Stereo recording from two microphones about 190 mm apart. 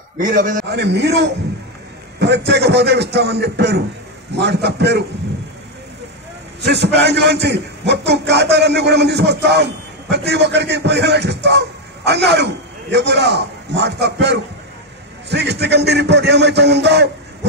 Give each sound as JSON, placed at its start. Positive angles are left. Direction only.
{"t": 0.2, "sound": "a man's voice", "side_deg": -45}
{"t": 0.7, "sound": "a man's voice", "side_deg": -65}
{"t": 6.6, "sound": "a man's voice", "side_deg": -65}